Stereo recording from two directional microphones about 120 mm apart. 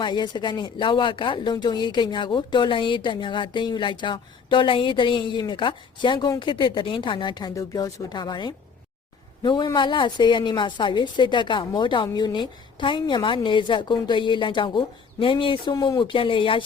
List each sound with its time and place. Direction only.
0.0 s speech: 40° left (ahead or behind)